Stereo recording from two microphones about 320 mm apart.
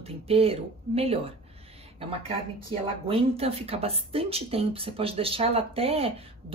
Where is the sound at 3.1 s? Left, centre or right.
Centre.